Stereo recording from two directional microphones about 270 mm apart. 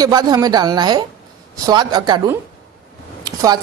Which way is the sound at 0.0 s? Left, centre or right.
Centre.